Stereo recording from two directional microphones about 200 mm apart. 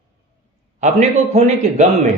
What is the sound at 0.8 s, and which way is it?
Speech, 35° right (ahead or behind).